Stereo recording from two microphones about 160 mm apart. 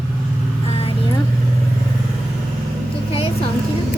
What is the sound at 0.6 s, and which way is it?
Vehicle, 40° left (ahead or behind).